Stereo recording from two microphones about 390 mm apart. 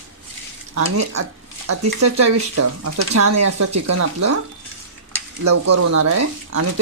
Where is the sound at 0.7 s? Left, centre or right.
Right.